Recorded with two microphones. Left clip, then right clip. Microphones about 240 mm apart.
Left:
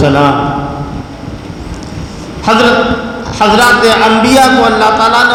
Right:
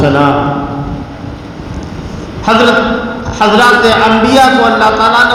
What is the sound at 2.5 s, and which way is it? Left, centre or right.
A man's voice, left.